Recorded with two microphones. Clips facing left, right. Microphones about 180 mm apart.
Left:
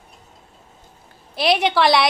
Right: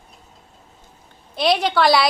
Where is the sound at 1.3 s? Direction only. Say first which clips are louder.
Even; centre (ahead or behind).